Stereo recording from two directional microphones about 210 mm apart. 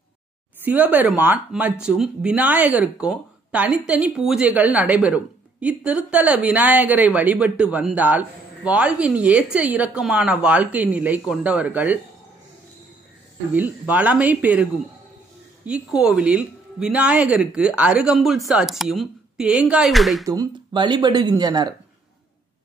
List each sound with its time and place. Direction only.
0.7 s speech: 5° right (ahead or behind)
13.5 s speech: 5° right (ahead or behind)
20.2 s speech: 20° right (ahead or behind)